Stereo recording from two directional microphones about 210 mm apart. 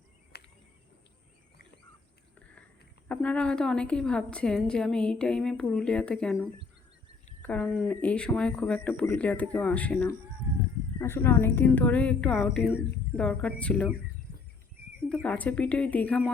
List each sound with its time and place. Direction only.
0.3 s a sound: 50° left (ahead or behind)
3.1 s a woman's voice: 5° left (ahead or behind)
7.4 s a woman's voice: 5° left (ahead or behind)
15.1 s a woman's voice: 5° left (ahead or behind)